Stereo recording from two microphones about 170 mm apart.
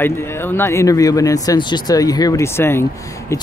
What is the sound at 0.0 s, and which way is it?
Speech, 15° left (ahead or behind).